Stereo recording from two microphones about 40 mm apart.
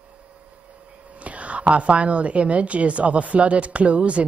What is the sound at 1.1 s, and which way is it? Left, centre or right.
A woman's voice, right.